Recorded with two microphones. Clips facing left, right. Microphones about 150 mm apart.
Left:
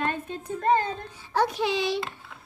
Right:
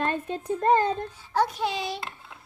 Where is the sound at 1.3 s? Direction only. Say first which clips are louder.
Left 1 dB; 75° left (ahead or behind).